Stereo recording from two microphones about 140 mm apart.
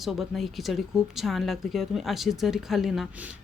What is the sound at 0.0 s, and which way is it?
Speech, centre (ahead or behind).